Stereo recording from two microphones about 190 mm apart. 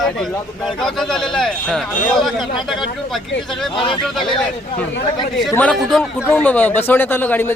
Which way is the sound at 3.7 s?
25° left (ahead or behind).